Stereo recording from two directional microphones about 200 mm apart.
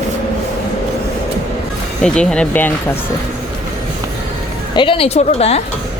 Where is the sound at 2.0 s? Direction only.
5° left (ahead or behind).